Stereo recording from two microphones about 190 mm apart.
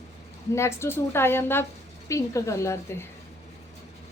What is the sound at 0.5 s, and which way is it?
A woman's voice, 15° left (ahead or behind).